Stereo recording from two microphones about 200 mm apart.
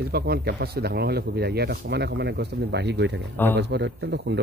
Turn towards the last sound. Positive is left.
turn(degrees=-60)  # may be behind; listen again after turning